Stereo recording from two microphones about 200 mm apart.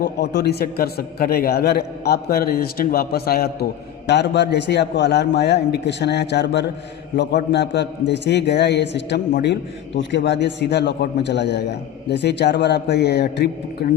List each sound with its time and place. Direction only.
0.0 s a man's voice: 55° left (ahead or behind)